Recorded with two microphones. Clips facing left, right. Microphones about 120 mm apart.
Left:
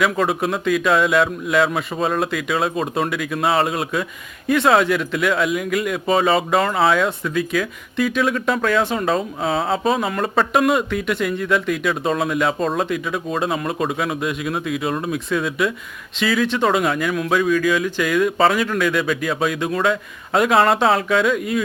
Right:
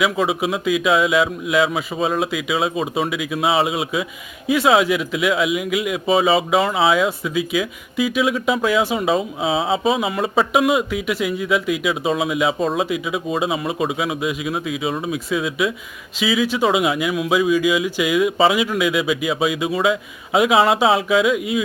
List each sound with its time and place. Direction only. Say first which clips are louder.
0.0 s speech: even; 5° right (ahead or behind)